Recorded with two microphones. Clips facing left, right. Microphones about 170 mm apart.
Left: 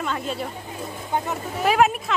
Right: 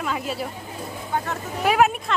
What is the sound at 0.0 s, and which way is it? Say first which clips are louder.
Speech: even; 5° right (ahead or behind).